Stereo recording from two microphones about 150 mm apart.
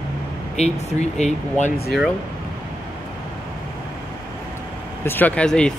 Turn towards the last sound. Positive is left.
turn(degrees=5)  # may be behind; listen again after turning